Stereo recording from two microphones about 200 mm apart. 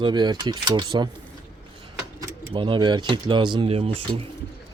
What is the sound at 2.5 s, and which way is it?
Speech, 25° right (ahead or behind).